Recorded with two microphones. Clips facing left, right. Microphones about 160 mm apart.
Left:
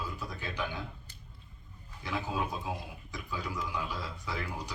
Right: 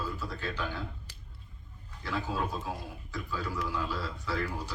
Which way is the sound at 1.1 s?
90° right.